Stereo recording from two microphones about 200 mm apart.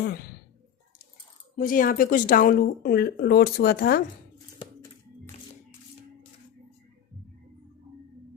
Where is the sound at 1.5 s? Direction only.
45° left (ahead or behind).